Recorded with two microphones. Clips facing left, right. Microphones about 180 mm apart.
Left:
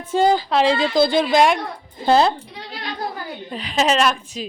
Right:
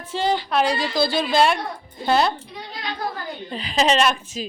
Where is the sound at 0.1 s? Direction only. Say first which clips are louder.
Left 7 dB; 50° left (ahead or behind).